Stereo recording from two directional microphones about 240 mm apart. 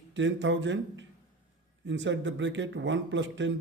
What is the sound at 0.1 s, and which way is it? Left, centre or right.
A man's voice, right.